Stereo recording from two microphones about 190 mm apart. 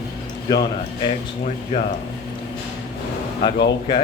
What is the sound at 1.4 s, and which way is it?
Speech, 35° left (ahead or behind).